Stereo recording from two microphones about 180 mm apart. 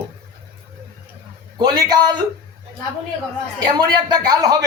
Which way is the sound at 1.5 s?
25° right (ahead or behind).